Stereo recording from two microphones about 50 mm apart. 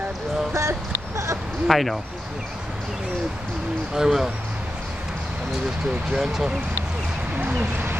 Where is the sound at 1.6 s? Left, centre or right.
Centre.